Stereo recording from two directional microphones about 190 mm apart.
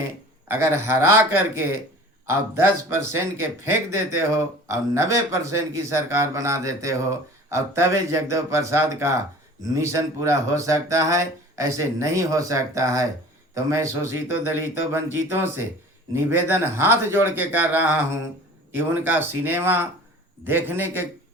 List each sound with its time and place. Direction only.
0.4 s a man's voice: 15° right (ahead or behind)